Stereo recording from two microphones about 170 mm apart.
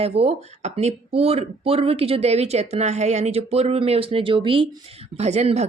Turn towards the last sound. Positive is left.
turn(degrees=-40)  # may be behind; listen again after turning